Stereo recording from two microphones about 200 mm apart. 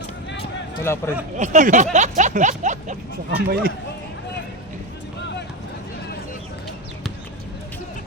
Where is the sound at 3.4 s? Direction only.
50° right (ahead or behind).